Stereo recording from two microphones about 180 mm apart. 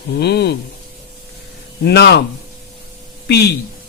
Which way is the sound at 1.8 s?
65° left (ahead or behind).